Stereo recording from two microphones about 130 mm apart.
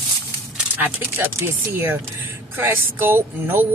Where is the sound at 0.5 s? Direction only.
15° right (ahead or behind).